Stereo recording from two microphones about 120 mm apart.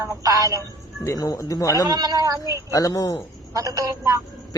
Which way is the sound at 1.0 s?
30° left (ahead or behind).